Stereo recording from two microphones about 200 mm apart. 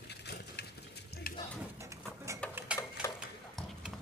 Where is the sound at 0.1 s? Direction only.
55° left (ahead or behind).